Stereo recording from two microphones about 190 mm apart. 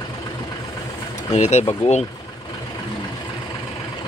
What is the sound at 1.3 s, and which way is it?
Speech, 35° left (ahead or behind).